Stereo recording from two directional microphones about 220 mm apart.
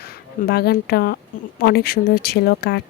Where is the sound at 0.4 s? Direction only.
45° left (ahead or behind).